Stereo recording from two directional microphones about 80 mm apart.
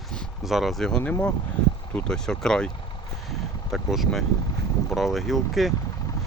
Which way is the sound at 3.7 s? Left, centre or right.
Centre.